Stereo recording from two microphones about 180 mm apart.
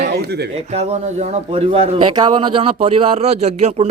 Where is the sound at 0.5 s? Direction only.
35° right (ahead or behind).